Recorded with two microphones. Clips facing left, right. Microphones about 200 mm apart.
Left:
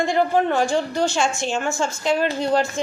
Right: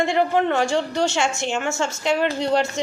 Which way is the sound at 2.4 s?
20° right (ahead or behind).